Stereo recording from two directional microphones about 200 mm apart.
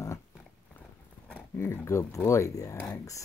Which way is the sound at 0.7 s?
5° left (ahead or behind).